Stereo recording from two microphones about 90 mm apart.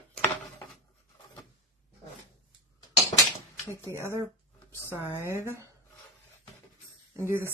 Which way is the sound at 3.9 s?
35° right (ahead or behind).